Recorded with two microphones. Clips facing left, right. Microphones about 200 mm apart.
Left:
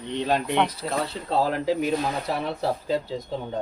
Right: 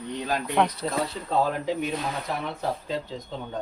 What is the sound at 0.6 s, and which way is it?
Speech, centre (ahead or behind).